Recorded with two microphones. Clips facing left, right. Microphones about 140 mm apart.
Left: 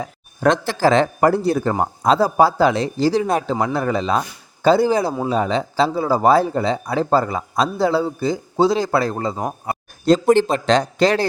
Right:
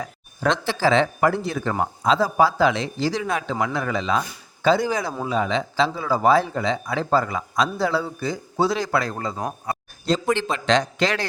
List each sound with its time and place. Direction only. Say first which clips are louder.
0.4 s speech: left 5 dB; 45° left (ahead or behind); by 9.4 s 25° left (ahead or behind)
9.7 s a sound: left 2 dB; 25° left (ahead or behind)
10.1 s speech: left 8 dB; 40° left (ahead or behind)